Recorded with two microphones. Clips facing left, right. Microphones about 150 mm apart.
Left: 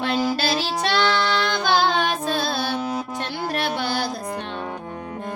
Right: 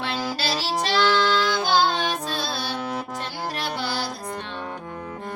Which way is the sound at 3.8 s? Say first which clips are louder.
Left 3 dB; 50° left (ahead or behind).